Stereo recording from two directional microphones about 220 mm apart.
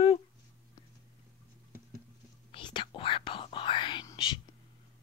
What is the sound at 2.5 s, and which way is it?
Speech, 20° left (ahead or behind).